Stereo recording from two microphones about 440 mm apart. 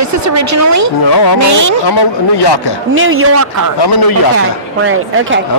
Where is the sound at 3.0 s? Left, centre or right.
Right.